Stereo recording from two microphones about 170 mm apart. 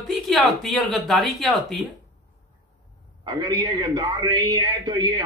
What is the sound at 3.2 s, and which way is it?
A man's voice, 25° right (ahead or behind).